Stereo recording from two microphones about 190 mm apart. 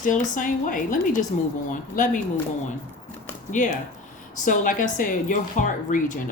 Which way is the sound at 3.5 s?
40° left (ahead or behind).